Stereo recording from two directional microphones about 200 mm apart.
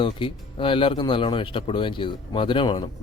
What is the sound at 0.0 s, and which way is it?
Speech, 25° left (ahead or behind).